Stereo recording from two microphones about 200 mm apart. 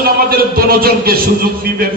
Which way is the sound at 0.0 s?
50° right (ahead or behind).